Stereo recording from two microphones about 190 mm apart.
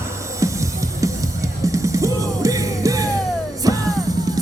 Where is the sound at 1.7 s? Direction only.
15° right (ahead or behind).